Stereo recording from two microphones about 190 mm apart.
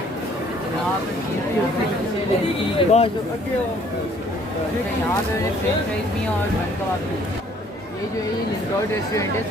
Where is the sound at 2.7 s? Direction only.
30° left (ahead or behind).